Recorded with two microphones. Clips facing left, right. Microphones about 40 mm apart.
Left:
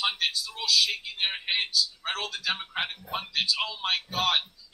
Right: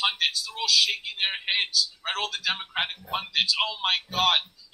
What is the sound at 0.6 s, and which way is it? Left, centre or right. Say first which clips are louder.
Speech: right 2 dB; right.